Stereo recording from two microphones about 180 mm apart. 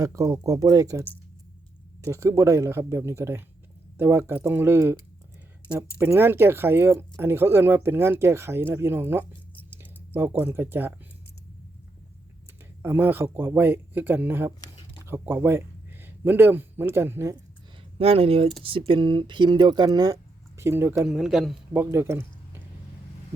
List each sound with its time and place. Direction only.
0.0 s speech: 20° right (ahead or behind)
6.0 s speech: 10° right (ahead or behind)
12.8 s speech: 10° right (ahead or behind)
17.9 s speech: 35° right (ahead or behind); by 21.1 s 15° right (ahead or behind)
21.1 s a man's voice: centre (ahead or behind)